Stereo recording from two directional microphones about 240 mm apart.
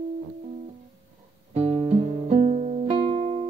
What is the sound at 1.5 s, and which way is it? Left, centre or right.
Music, right.